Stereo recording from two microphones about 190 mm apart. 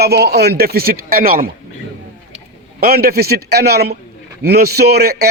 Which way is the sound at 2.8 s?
55° right (ahead or behind).